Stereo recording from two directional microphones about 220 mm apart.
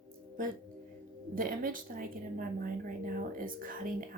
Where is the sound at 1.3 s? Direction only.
40° right (ahead or behind).